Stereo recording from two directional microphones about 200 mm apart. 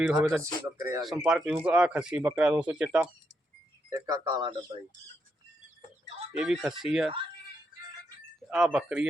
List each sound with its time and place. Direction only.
0.0 s speech: 10° right (ahead or behind)
3.9 s speech: 15° right (ahead or behind)
6.3 s speech: 5° right (ahead or behind)
8.4 s speech: 5° right (ahead or behind)